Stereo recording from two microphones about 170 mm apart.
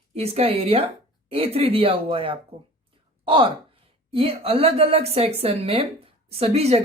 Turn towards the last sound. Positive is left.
turn(degrees=-35)  # may be behind; listen again after turning